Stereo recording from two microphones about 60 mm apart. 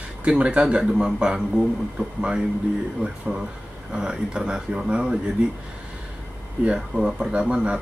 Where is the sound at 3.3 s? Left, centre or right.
Right.